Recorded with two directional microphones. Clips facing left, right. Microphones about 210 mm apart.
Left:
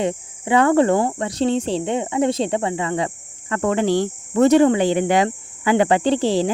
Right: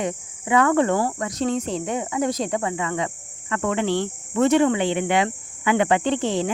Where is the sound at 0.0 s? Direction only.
30° left (ahead or behind).